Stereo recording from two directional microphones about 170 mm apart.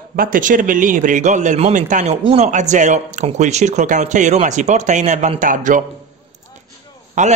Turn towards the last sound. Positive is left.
turn(degrees=-45)  # may be behind; listen again after turning